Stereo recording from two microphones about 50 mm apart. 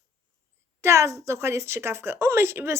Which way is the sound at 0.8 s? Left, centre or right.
Right.